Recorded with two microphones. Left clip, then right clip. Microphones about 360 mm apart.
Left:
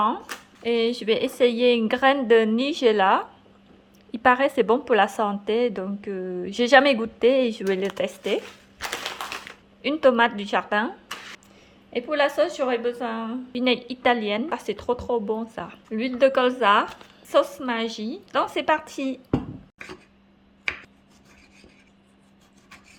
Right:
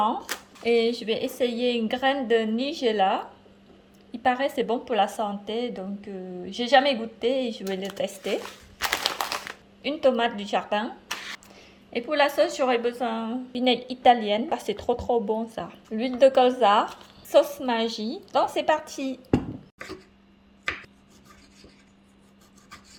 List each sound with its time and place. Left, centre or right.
0.6 s a woman's voice: centre
9.8 s a woman's voice: centre
11.9 s a woman's voice: centre